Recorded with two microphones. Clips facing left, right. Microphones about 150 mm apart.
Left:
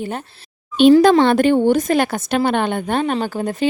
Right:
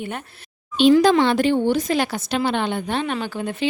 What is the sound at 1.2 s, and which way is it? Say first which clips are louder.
A woman's voice: left 4 dB; 50° left (ahead or behind).